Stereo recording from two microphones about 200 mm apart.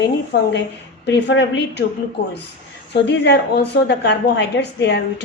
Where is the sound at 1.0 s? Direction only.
60° left (ahead or behind).